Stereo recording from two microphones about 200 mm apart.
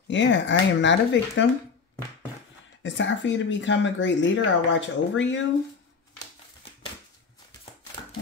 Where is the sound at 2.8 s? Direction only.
65° left (ahead or behind).